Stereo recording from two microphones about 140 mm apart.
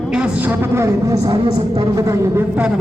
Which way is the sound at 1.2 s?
30° right (ahead or behind).